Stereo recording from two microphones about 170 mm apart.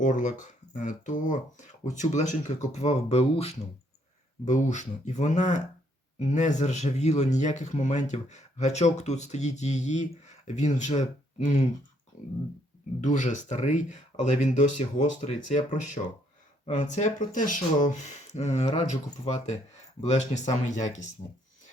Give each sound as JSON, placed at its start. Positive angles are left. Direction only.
{"t": 0.0, "sound": "speech", "side_deg": 50}
{"t": 12.1, "sound": "speech", "side_deg": 45}